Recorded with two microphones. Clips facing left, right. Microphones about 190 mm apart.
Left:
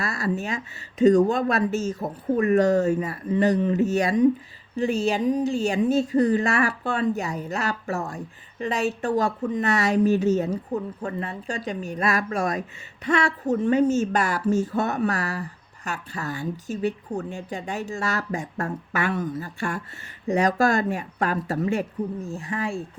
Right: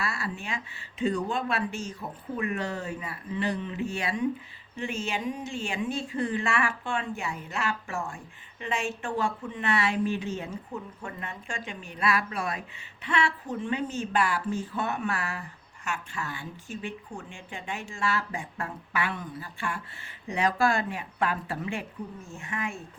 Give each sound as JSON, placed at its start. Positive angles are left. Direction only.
{"t": 0.0, "sound": "a woman's voice", "side_deg": 40}